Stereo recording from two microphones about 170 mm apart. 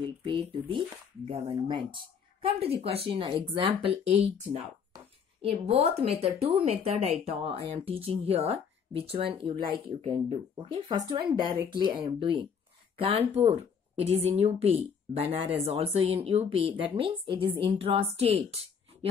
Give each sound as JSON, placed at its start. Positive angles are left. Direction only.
{"t": 0.2, "sound": "a woman's voice", "side_deg": -30}